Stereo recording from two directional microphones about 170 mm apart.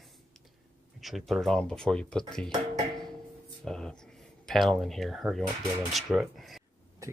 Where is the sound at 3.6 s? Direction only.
5° left (ahead or behind).